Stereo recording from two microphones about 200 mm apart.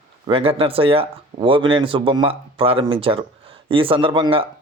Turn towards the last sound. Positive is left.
turn(degrees=-25)  # may be behind; listen again after turning